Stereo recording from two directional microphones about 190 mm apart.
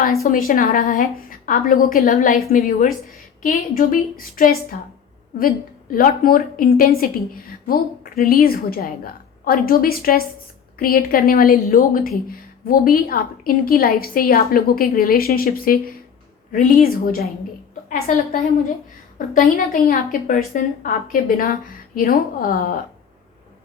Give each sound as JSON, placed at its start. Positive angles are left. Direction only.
{"t": 0.0, "sound": "a woman's voice", "side_deg": 50}
{"t": 18.1, "sound": "a woman's voice", "side_deg": 45}
{"t": 19.5, "sound": "a woman's voice", "side_deg": 50}